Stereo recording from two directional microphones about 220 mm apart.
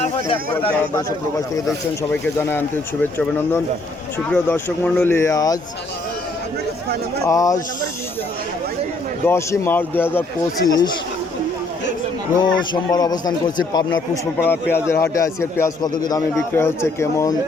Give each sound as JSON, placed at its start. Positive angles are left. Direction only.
{"t": 0.6, "sound": "a man's voice", "side_deg": 15}
{"t": 7.3, "sound": "a man's voice", "side_deg": 15}
{"t": 9.2, "sound": "a man's voice", "side_deg": 10}
{"t": 12.4, "sound": "a man's voice", "side_deg": 20}